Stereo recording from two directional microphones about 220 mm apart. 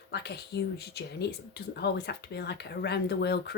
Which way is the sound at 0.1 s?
50° left (ahead or behind).